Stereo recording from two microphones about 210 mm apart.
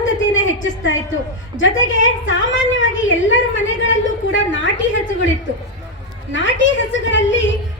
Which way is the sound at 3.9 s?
60° left (ahead or behind).